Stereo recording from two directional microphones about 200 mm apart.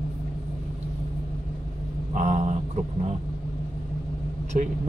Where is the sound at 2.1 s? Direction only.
40° right (ahead or behind).